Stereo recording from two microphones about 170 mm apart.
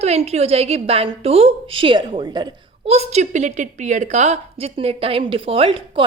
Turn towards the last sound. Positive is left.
turn(degrees=-30)  # may be behind; listen again after turning